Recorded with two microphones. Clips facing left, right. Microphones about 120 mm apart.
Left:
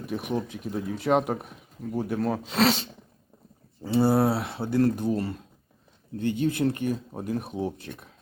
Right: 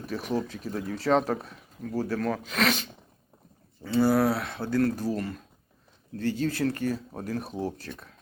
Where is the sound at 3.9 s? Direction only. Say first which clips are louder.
Left 1 dB; 25° left (ahead or behind).